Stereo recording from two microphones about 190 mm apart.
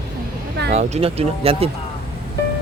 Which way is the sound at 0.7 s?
35° right (ahead or behind).